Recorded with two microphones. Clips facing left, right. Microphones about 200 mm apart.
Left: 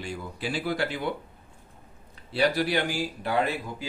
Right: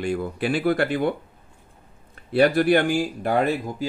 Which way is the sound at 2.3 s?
55° right (ahead or behind).